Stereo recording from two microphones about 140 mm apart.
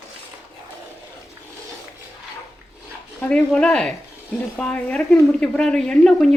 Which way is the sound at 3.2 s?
10° left (ahead or behind).